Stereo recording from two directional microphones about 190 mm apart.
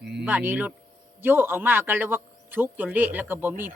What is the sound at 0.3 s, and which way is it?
Speech, 10° right (ahead or behind).